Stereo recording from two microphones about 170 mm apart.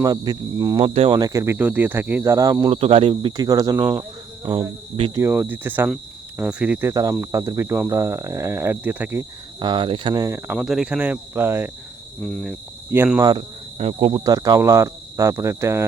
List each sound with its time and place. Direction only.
0.0 s speech: 20° right (ahead or behind)
3.3 s speech: 20° right (ahead or behind)
5.1 s speech: 15° right (ahead or behind)
5.9 s cricket: 5° right (ahead or behind)
6.9 s speech: 20° right (ahead or behind)
9.6 s speech: 30° right (ahead or behind)
10.6 s speech: 5° right (ahead or behind)
12.2 s speech: 5° left (ahead or behind)
12.9 s speech: 10° right (ahead or behind)
13.7 s speech: 35° right (ahead or behind); by 15.9 s 15° right (ahead or behind)